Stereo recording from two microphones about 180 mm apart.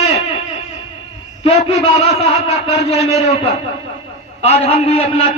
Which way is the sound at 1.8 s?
35° left (ahead or behind).